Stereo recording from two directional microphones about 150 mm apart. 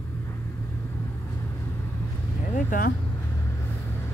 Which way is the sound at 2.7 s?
70° left (ahead or behind).